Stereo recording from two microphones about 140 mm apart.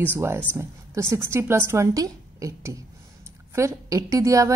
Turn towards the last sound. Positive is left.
turn(degrees=-20)  # may be behind; listen again after turning